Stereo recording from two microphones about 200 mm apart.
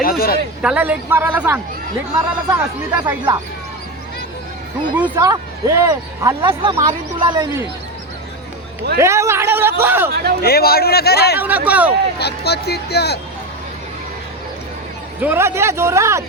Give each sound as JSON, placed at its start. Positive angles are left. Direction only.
{"t": 0.0, "sound": "speech", "side_deg": 45}
{"t": 0.6, "sound": "speech", "side_deg": -5}
{"t": 4.9, "sound": "speech", "side_deg": -10}
{"t": 9.0, "sound": "speech", "side_deg": -15}
{"t": 10.4, "sound": "speech", "side_deg": 50}
{"t": 11.3, "sound": "speech", "side_deg": -10}
{"t": 12.2, "sound": "speech", "side_deg": 55}
{"t": 15.2, "sound": "speech", "side_deg": -10}